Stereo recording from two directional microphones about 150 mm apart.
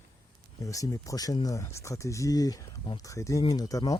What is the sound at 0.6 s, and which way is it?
Speech, 20° left (ahead or behind).